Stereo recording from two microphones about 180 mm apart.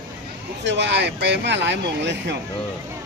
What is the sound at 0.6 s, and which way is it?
Speech, 75° right (ahead or behind).